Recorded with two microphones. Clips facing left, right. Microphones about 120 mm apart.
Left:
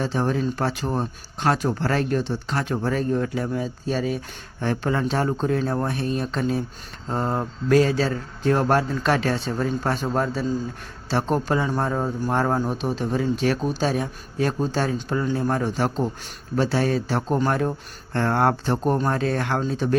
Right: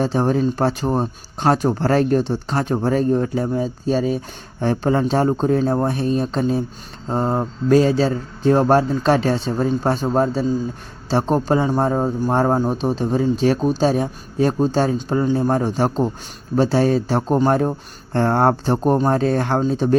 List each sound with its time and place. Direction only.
0.0 s speech: 35° right (ahead or behind)